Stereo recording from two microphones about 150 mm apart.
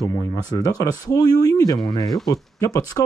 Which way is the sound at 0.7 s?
25° left (ahead or behind).